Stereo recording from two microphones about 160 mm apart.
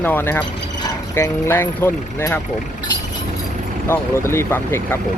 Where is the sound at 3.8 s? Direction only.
15° left (ahead or behind).